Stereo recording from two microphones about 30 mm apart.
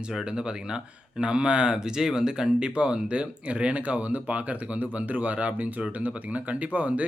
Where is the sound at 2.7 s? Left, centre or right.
Right.